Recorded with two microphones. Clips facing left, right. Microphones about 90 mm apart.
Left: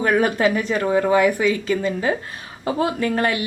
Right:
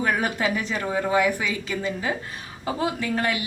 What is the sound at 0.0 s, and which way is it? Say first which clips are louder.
A woman's voice: left 6 dB; 50° left (ahead or behind).